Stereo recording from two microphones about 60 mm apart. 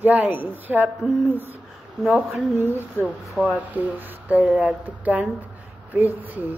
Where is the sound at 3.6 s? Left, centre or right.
Right.